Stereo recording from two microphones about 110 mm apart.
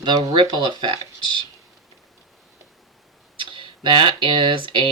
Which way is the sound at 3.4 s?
50° right (ahead or behind).